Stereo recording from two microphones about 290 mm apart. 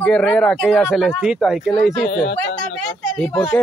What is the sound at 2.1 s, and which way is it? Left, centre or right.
Speech, left.